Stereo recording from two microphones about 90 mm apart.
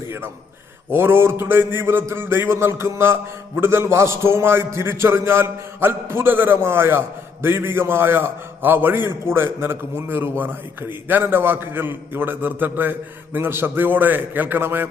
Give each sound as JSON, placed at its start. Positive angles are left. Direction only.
{"t": 0.9, "sound": "a man's voice", "side_deg": -25}